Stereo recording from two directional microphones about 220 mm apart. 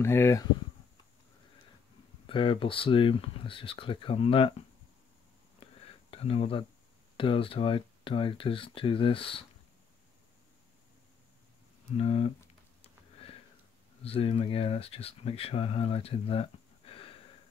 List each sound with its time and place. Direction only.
0.0 s speech: 10° left (ahead or behind)
2.2 s speech: 25° left (ahead or behind)
6.0 s speech: 25° left (ahead or behind)
12.0 s speech: 30° left (ahead or behind)
12.8 s a sound: 25° left (ahead or behind)
14.0 s speech: 25° left (ahead or behind)